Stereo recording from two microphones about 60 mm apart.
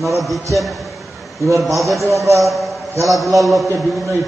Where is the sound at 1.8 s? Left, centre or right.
Centre.